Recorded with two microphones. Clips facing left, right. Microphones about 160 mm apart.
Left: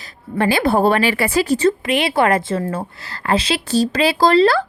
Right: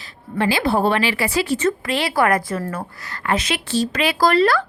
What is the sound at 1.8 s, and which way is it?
A woman's voice, 20° left (ahead or behind).